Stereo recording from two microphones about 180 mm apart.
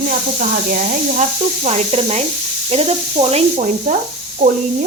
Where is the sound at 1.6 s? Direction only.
35° right (ahead or behind).